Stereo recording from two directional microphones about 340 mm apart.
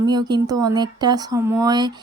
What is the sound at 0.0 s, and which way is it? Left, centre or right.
A woman's voice, centre.